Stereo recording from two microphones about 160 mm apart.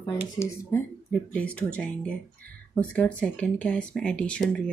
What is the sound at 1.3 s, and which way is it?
Speech, 10° left (ahead or behind).